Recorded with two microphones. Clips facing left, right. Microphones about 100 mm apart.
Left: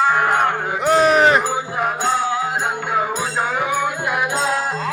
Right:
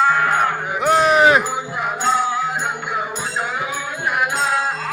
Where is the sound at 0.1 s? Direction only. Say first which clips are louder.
Left 1 dB; 25° left (ahead or behind).